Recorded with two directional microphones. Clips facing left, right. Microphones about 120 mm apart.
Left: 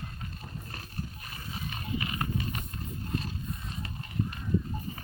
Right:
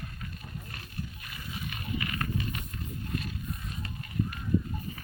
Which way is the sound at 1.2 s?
35° left (ahead or behind).